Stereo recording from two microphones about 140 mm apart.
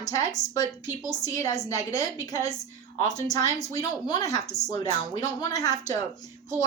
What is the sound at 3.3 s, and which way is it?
Speech, 25° left (ahead or behind).